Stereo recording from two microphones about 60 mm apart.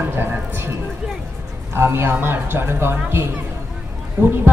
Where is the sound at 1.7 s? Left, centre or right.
Right.